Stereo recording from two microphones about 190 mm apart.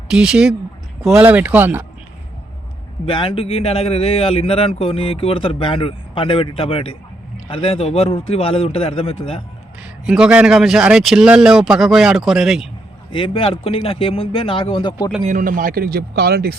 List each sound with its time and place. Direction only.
0.1 s a man's voice: 5° right (ahead or behind)
3.1 s a man's voice: 30° left (ahead or behind)
9.8 s a man's voice: 5° right (ahead or behind)
13.1 s a man's voice: 25° left (ahead or behind)
15.2 s speech: 40° right (ahead or behind)